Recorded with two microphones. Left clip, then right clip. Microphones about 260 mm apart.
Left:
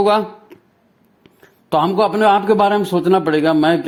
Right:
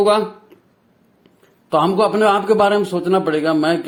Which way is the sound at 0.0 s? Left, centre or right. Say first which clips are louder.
Even; left.